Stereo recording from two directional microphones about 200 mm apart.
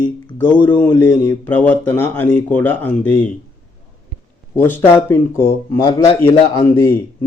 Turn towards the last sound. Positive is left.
turn(degrees=15)  # may be behind; listen again after turning